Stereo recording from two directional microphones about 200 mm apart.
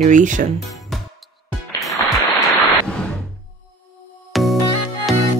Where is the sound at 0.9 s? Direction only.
Centre (ahead or behind).